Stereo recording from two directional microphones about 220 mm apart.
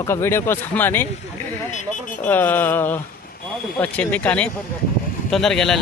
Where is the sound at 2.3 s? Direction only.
10° left (ahead or behind).